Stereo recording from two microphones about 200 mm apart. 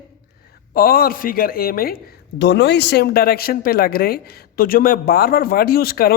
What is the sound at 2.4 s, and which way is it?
Speech, 60° left (ahead or behind).